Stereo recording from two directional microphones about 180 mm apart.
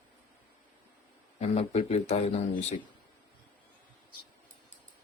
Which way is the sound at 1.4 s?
35° left (ahead or behind).